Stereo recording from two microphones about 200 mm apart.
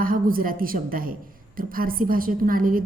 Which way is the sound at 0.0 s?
45° right (ahead or behind).